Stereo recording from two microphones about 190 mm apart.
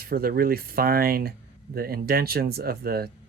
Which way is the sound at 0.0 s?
50° right (ahead or behind).